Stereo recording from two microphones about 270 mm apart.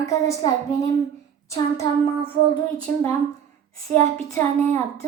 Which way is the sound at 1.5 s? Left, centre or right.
Centre.